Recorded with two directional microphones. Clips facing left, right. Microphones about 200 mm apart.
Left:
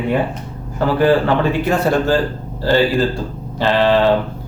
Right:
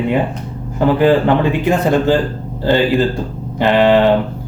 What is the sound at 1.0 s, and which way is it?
A man's voice, 15° right (ahead or behind).